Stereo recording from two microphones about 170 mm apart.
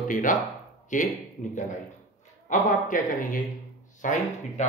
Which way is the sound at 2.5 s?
50° left (ahead or behind).